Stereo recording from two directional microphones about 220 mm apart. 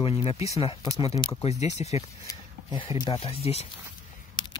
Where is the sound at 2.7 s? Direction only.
20° left (ahead or behind).